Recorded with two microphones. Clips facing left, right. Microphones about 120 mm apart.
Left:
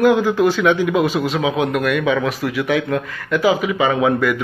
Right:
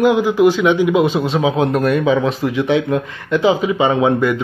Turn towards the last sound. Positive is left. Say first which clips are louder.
# right 2 dB
turn(degrees=-25)  # may be behind; listen again after turning